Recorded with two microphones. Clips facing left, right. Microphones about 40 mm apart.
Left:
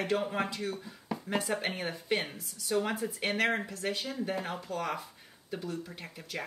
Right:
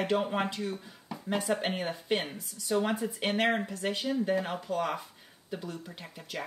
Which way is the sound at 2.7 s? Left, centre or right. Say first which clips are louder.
Right 2 dB; right.